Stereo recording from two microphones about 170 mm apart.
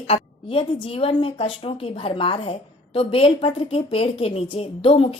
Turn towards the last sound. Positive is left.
turn(degrees=35)  # may be behind; listen again after turning